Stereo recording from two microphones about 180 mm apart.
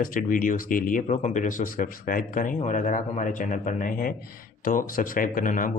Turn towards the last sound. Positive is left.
turn(degrees=50)  # may be behind; listen again after turning